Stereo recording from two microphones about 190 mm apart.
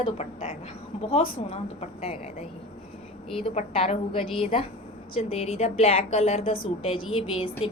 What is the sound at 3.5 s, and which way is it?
A woman's voice, 35° left (ahead or behind).